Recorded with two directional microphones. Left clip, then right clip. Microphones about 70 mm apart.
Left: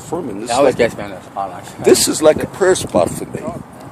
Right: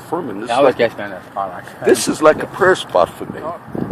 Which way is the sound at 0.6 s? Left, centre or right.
Left.